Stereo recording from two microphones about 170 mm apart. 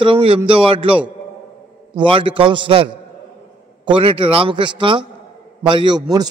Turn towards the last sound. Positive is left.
turn(degrees=-25)  # may be behind; listen again after turning